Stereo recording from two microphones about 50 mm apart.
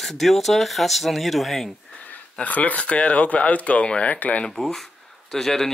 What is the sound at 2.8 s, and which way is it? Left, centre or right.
Speech, left.